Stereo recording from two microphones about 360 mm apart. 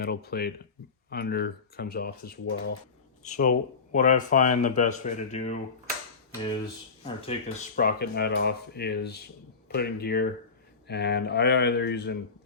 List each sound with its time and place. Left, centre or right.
0.0 s speech: left